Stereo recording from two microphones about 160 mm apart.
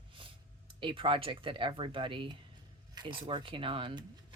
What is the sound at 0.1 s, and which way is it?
Speech, 35° right (ahead or behind).